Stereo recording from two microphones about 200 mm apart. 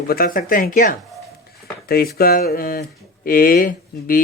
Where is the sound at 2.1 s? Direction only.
50° left (ahead or behind).